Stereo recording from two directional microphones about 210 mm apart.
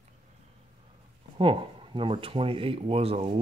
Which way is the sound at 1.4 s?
25° right (ahead or behind).